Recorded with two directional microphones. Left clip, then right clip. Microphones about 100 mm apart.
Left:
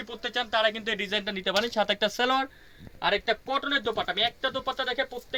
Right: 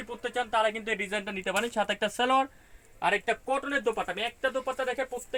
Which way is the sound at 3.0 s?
40° right (ahead or behind).